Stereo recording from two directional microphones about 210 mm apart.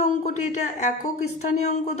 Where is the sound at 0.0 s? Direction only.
35° left (ahead or behind).